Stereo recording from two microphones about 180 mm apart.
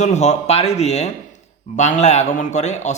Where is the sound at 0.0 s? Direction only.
40° left (ahead or behind).